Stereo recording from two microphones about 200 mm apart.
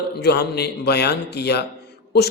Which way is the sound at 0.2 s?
55° left (ahead or behind).